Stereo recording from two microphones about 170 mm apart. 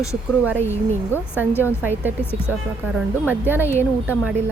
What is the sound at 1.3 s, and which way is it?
Speech, 10° right (ahead or behind).